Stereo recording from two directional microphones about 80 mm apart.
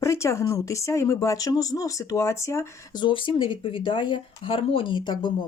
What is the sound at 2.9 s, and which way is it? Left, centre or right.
Speech, left.